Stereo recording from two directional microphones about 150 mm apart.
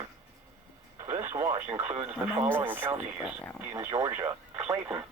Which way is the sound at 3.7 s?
25° right (ahead or behind).